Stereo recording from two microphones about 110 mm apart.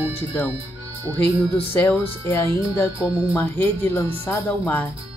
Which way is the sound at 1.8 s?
25° left (ahead or behind).